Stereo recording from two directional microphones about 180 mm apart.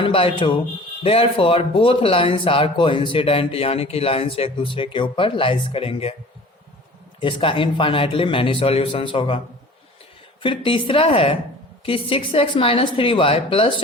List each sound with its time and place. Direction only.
0.0 s a man's voice: 30° left (ahead or behind)
7.2 s a man's voice: 30° left (ahead or behind)
10.4 s a man's voice: 30° left (ahead or behind)